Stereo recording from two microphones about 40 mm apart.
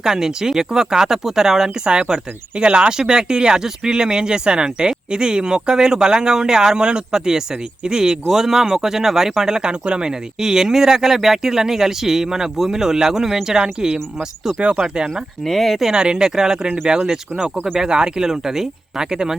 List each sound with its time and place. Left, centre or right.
0.0 s speech: centre
1.8 s speech: right
15.1 s speech: centre
15.8 s speech: centre